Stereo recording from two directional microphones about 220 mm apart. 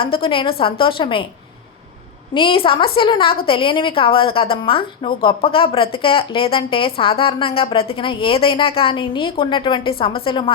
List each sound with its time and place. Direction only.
0.0 s a woman's voice: 25° left (ahead or behind)
2.3 s a woman's voice: 25° left (ahead or behind)